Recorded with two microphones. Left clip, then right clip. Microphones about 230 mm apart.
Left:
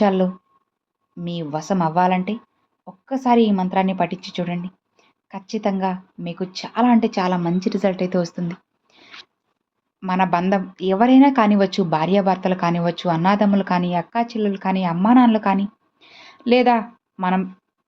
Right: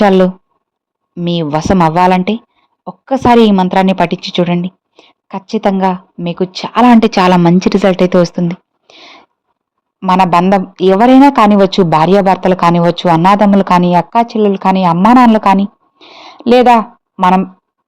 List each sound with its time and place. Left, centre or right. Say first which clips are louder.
0.0 s a woman's voice: right 10 dB; right